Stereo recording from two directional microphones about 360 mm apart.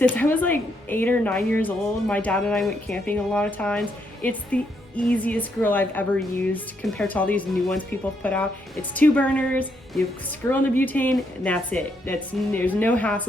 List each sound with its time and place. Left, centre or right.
0.0 s speech: centre